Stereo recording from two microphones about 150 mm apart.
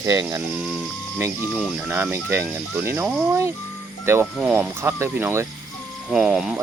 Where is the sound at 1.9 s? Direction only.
15° right (ahead or behind).